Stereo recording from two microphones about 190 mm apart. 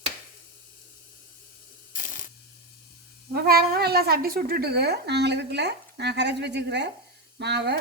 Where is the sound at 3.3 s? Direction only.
55° right (ahead or behind).